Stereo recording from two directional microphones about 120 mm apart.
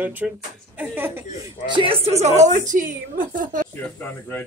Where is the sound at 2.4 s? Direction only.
90° right.